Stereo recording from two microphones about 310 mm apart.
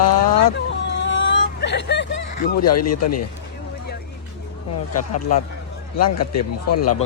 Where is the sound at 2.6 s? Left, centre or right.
Left.